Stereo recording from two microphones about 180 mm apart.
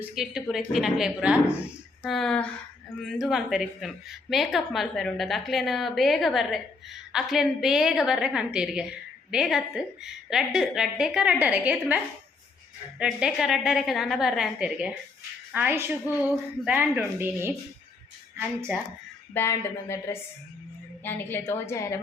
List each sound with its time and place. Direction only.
0.0 s a woman's voice: centre (ahead or behind)
13.0 s a woman's voice: 5° right (ahead or behind)
18.7 s speech: 10° right (ahead or behind)
19.3 s a woman's voice: 15° left (ahead or behind)